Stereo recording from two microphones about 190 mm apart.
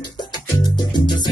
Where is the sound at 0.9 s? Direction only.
25° left (ahead or behind).